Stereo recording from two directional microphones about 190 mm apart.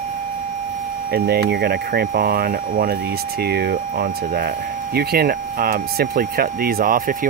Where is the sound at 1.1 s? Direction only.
55° right (ahead or behind).